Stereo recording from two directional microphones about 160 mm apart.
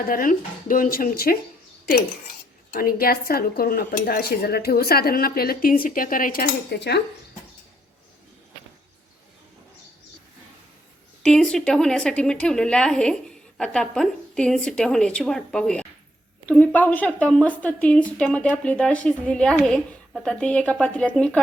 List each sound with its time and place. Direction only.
0.1 s speech: 60° left (ahead or behind)
2.7 s speech: 65° left (ahead or behind); by 7.0 s 90° left
11.2 s a woman's voice: 5° left (ahead or behind)